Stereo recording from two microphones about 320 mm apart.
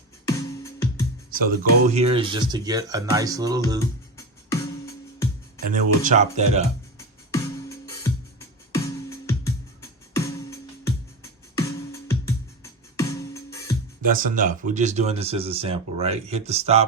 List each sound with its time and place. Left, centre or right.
0.3 s music: centre
1.3 s speech: right; by 3.6 s centre
3.8 s music: centre
6.0 s speech: right
7.3 s music: centre
14.0 s speech: right